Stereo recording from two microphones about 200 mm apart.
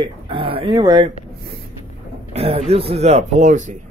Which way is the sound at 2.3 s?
30° right (ahead or behind).